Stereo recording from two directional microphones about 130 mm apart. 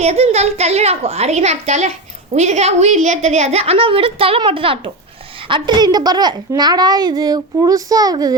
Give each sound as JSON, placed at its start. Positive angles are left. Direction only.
{"t": 0.0, "sound": "a child's voice", "side_deg": -55}